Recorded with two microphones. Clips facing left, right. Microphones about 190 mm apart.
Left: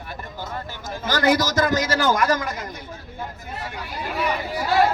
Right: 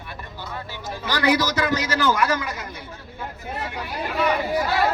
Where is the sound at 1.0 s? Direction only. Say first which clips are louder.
Left 1 dB; 45° left (ahead or behind).